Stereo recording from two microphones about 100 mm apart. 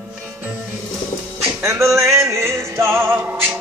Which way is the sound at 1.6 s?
30° right (ahead or behind).